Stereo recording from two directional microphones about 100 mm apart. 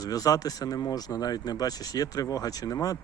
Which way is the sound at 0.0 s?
35° left (ahead or behind).